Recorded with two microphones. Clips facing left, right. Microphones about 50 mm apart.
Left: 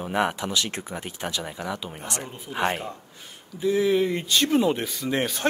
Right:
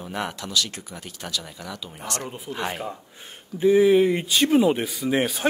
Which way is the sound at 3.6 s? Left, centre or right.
Right.